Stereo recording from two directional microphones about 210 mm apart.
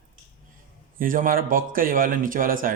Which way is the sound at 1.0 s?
40° right (ahead or behind).